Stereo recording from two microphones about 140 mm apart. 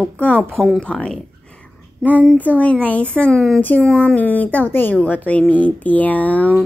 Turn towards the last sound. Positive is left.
turn(degrees=10)  # may be behind; listen again after turning